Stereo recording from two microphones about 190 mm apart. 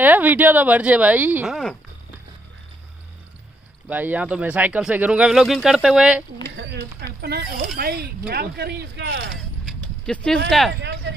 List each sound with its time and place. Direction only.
0.0 s speech: 10° right (ahead or behind)
3.9 s speech: 10° right (ahead or behind)
6.5 s speech: 60° right (ahead or behind)
9.3 s a sound: 5° left (ahead or behind)
10.8 s speech: 65° right (ahead or behind)